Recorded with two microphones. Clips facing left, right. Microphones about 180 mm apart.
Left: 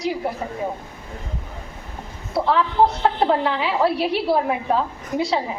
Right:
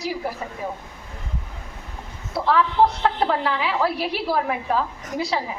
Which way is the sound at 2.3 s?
25° left (ahead or behind).